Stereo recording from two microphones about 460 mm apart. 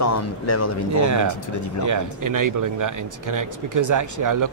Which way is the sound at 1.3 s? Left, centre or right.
Left.